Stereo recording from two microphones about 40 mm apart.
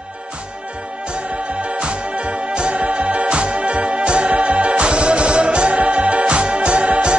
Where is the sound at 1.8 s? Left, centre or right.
Right.